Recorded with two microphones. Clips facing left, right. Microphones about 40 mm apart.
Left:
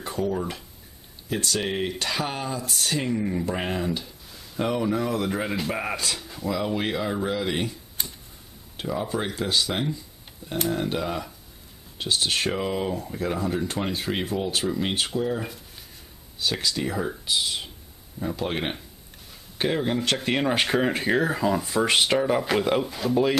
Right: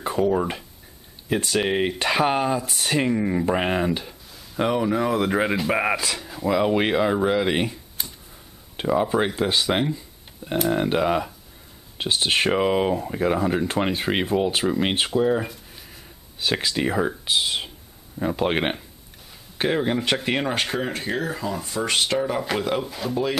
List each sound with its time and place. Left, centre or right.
0.0 s speech: right
4.6 s speech: centre
6.4 s speech: right
8.0 s tick-tock: centre
8.7 s speech: right
16.3 s speech: right
19.6 s speech: centre
20.5 s speech: centre